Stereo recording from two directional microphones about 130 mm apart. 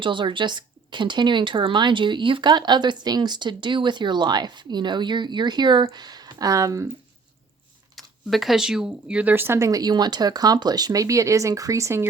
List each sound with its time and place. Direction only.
0.0 s speech: 40° right (ahead or behind)
7.9 s speech: centre (ahead or behind); by 12.0 s 20° right (ahead or behind)